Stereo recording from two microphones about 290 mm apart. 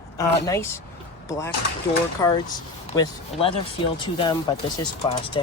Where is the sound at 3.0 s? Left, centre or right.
Centre.